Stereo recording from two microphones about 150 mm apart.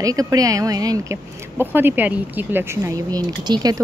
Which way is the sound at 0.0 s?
25° right (ahead or behind).